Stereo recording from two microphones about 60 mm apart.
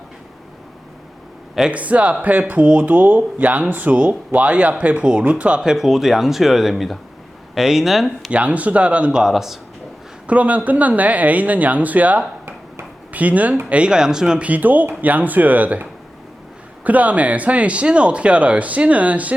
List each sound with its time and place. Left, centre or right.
1.7 s speech: right; by 8.3 s centre
8.3 s speech: right
9.2 s speech: centre
10.2 s speech: right
14.4 s speech: right